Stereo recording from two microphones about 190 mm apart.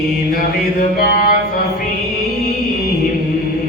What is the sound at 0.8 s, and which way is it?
Mantra, 45° left (ahead or behind).